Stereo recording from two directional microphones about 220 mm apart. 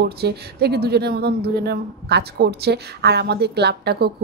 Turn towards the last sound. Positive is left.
turn(degrees=-45)  # may be behind; listen again after turning